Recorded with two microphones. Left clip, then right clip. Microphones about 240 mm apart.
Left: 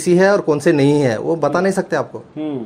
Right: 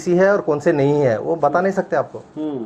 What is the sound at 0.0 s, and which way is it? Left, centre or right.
Speech, left.